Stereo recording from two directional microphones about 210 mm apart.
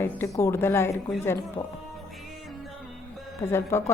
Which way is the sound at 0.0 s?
10° left (ahead or behind).